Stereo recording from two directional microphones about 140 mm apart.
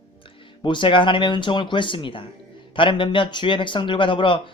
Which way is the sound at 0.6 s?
35° left (ahead or behind).